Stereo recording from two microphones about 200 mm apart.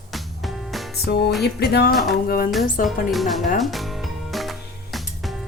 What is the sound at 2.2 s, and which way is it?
Music, 50° left (ahead or behind).